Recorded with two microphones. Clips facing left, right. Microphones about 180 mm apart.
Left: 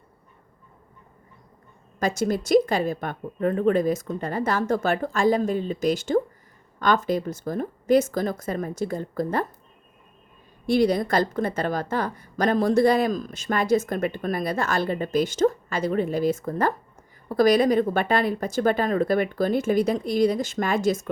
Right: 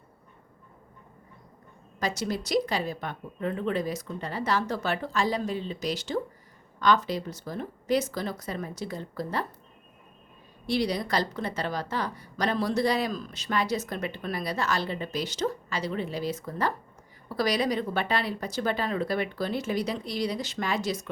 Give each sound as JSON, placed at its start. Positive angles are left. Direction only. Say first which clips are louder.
{"t": 2.0, "sound": "a woman's voice", "louder": "left 6 dB", "side_deg": 50}
{"t": 10.7, "sound": "a woman's voice", "louder": "left 7 dB", "side_deg": 50}